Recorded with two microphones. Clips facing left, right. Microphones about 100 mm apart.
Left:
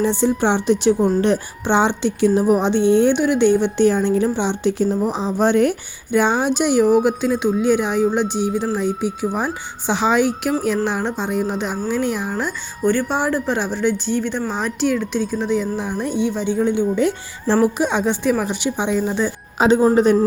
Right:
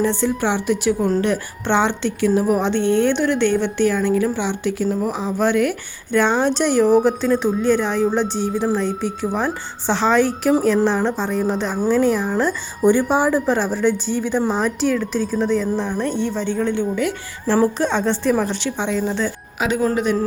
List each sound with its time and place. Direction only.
0.0 s a woman's voice: 20° left (ahead or behind)
0.9 s speech: centre (ahead or behind)
1.6 s a woman's voice: 15° left (ahead or behind)
6.1 s speech: 10° left (ahead or behind)
12.8 s speech: 10° right (ahead or behind); by 16.8 s 10° left (ahead or behind)
16.9 s a woman's voice: 25° left (ahead or behind)
17.6 s a woman's voice: 10° left (ahead or behind)
19.5 s a woman's voice: 30° left (ahead or behind)